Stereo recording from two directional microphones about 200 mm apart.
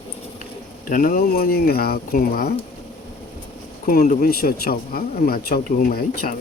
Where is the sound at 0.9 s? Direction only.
45° left (ahead or behind).